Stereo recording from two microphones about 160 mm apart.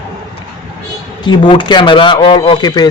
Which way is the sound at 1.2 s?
30° left (ahead or behind).